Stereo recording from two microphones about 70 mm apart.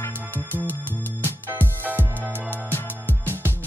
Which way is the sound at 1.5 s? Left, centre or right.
Right.